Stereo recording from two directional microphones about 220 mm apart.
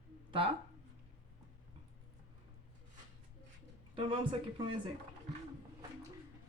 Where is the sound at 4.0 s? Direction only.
25° right (ahead or behind).